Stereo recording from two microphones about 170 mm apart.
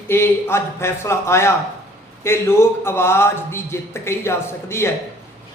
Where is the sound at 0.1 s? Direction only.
15° left (ahead or behind).